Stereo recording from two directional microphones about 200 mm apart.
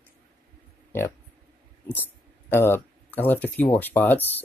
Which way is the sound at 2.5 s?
10° left (ahead or behind).